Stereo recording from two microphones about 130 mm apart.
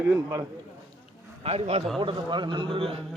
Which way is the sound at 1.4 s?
55° right (ahead or behind).